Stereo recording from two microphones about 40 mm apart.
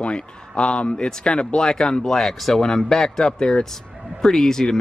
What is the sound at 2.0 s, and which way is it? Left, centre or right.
Speech, centre.